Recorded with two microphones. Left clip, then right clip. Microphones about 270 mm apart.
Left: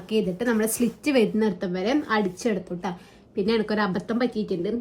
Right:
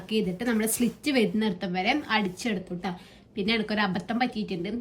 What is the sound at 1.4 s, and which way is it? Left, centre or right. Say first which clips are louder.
Speech: left 3 dB; centre.